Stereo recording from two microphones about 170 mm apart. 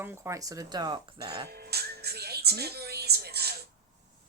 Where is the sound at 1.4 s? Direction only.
65° right (ahead or behind).